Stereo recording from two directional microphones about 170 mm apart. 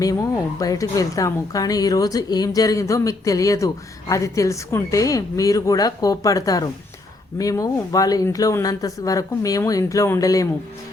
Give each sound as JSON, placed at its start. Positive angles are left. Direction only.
{"t": 0.0, "sound": "speech", "side_deg": 20}